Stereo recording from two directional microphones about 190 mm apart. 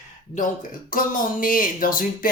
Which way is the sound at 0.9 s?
45° left (ahead or behind).